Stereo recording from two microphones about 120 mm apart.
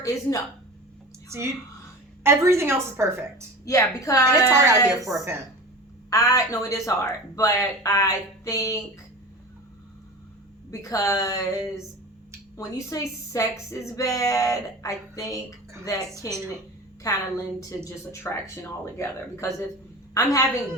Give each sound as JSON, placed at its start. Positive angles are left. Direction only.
{"t": 0.0, "sound": "speech", "side_deg": 30}
{"t": 1.3, "sound": "a woman's voice", "side_deg": -20}
{"t": 3.7, "sound": "speech", "side_deg": 30}
{"t": 4.4, "sound": "a woman's voice", "side_deg": -25}
{"t": 6.1, "sound": "speech", "side_deg": 30}
{"t": 10.7, "sound": "speech", "side_deg": 25}
{"t": 17.0, "sound": "speech", "side_deg": 30}